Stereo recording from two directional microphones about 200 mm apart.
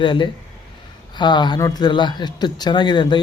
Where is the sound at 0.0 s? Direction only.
25° left (ahead or behind).